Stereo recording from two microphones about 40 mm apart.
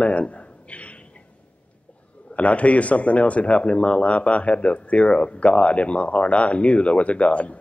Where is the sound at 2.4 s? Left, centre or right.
Left.